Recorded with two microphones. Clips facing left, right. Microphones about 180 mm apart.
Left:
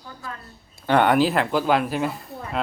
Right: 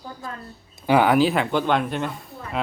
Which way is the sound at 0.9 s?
5° right (ahead or behind).